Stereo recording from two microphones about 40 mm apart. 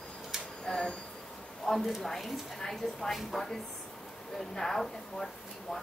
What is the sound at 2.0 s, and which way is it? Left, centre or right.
Speech, centre.